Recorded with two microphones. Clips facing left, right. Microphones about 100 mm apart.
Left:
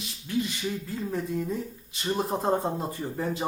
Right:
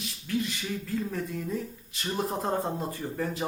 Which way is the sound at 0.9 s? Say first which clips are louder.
Left 1 dB; 20° left (ahead or behind).